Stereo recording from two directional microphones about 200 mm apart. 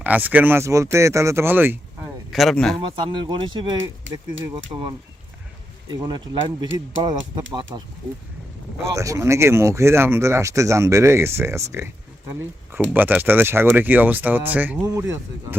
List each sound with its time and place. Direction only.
0.0 s speech: 10° right (ahead or behind)
2.3 s speech: centre (ahead or behind)
2.7 s speech: 25° right (ahead or behind)
4.1 s speech: 70° right (ahead or behind)
5.9 s speech: 20° right (ahead or behind)
9.0 s speech: 15° right (ahead or behind)